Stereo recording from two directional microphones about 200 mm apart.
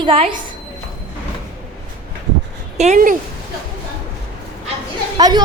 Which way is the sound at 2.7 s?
35° right (ahead or behind).